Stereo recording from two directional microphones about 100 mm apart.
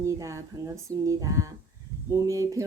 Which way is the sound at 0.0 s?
30° right (ahead or behind).